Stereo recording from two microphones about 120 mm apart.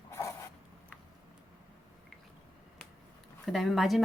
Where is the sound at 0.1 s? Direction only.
25° left (ahead or behind).